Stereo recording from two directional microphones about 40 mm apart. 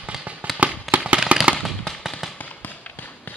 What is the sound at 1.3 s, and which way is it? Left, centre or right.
Fireworks, right.